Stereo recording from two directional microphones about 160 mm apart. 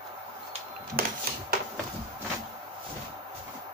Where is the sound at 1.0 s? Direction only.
65° right (ahead or behind).